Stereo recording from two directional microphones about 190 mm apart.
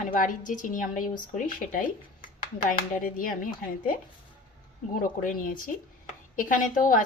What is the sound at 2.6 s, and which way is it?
A woman's voice, 45° left (ahead or behind).